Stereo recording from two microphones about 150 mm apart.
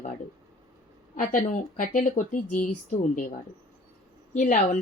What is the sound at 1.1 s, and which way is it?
Speech, 60° left (ahead or behind).